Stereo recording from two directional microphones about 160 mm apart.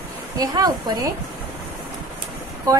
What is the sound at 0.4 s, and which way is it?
Speech, 25° right (ahead or behind).